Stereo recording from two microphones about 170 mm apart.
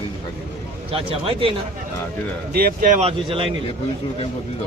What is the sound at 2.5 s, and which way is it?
Speech, 55° right (ahead or behind).